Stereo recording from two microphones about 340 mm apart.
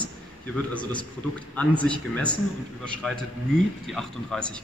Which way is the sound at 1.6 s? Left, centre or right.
Centre.